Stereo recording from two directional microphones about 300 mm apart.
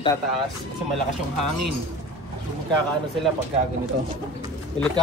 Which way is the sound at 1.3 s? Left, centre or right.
Right.